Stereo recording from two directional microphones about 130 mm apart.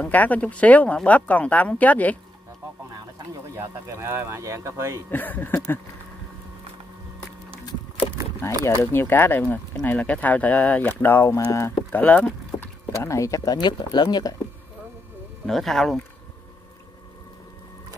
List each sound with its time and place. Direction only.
0.0 s speech: 10° left (ahead or behind)
3.5 s speech: 20° right (ahead or behind)
5.1 s speech: 15° left (ahead or behind)
8.6 s speech: 20° left (ahead or behind)
12.9 s speech: 25° left (ahead or behind)
15.4 s speech: 5° left (ahead or behind)